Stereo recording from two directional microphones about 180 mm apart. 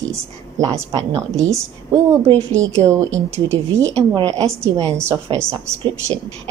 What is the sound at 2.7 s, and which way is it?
A woman's voice, 15° right (ahead or behind).